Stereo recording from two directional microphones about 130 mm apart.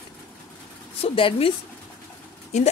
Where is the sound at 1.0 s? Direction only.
45° left (ahead or behind).